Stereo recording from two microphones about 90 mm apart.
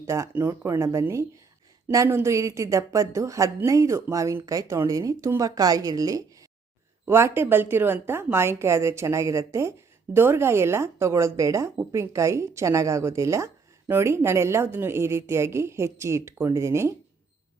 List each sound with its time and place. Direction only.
0.0 s a woman's voice: 30° right (ahead or behind)
7.0 s a woman's voice: 30° right (ahead or behind)